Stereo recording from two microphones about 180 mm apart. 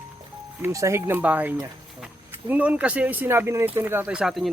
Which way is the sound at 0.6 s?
15° right (ahead or behind).